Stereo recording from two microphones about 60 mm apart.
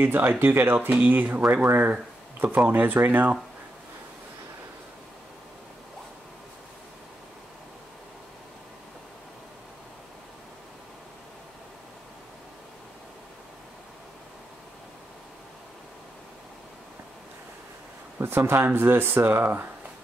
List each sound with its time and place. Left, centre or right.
0.0 s speech: right
18.2 s speech: right